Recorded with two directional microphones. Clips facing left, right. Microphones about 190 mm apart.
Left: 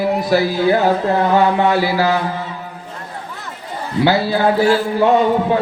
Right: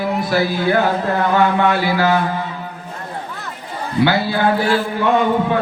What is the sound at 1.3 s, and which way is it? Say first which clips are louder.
Speech: even; 35° left (ahead or behind).